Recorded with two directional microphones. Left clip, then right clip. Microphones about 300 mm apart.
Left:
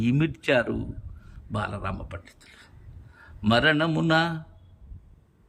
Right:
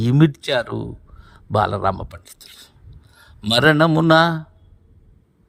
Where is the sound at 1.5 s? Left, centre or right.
Centre.